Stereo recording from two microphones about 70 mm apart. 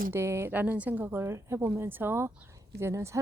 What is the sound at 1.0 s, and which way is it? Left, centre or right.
A woman's voice, right.